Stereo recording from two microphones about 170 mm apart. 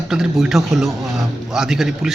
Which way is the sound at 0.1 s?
5° right (ahead or behind).